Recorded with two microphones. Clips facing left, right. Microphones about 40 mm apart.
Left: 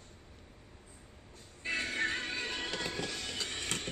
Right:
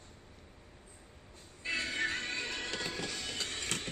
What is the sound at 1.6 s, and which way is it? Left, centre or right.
Music, centre.